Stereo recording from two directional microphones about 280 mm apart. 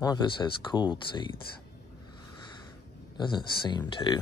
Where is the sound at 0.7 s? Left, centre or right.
Centre.